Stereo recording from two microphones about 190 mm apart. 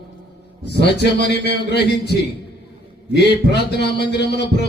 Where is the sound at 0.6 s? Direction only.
60° left (ahead or behind).